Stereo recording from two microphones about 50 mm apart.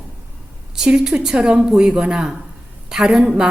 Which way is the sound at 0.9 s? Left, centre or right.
Right.